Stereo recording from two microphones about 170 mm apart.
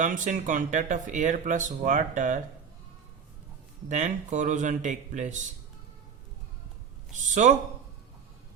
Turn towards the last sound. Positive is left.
turn(degrees=-45)  # may be behind; listen again after turning